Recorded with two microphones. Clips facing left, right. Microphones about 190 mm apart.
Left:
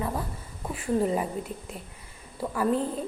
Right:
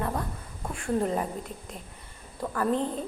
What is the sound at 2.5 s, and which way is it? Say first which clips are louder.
Speech: left 1 dB; 5° left (ahead or behind).